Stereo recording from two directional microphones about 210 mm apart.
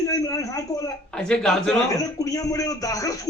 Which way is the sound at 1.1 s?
5° left (ahead or behind).